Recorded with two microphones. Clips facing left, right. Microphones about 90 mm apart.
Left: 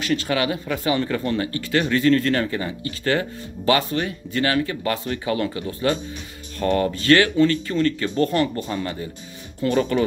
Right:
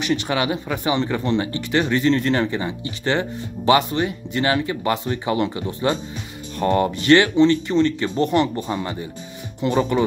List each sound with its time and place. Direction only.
0.0 s speech: 20° right (ahead or behind)